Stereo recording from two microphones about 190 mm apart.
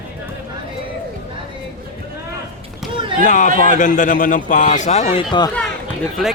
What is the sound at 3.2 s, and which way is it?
A man's voice, 40° left (ahead or behind).